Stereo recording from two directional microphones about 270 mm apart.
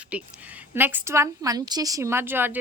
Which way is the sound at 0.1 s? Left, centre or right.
Centre.